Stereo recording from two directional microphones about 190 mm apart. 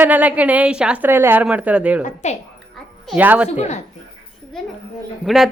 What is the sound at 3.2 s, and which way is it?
Speech, 10° right (ahead or behind).